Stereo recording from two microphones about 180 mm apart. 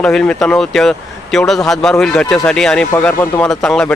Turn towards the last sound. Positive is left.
turn(degrees=5)  # may be behind; listen again after turning